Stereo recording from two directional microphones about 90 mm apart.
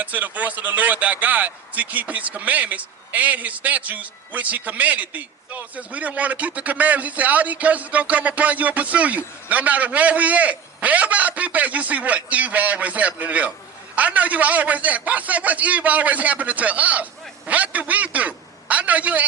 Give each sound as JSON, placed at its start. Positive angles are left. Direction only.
{"t": 0.0, "sound": "a man's voice", "side_deg": -20}